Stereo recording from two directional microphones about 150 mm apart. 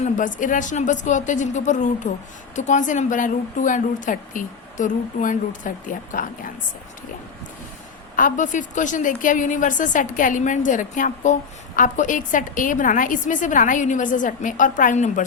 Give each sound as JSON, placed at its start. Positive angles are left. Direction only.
{"t": 0.0, "sound": "a woman's voice", "side_deg": 60}
{"t": 8.1, "sound": "a woman's voice", "side_deg": 60}